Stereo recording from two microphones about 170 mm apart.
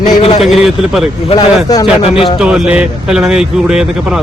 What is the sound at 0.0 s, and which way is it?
Speech, 45° left (ahead or behind).